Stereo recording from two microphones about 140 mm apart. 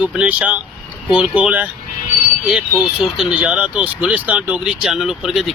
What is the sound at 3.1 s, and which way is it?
Speech, 5° right (ahead or behind).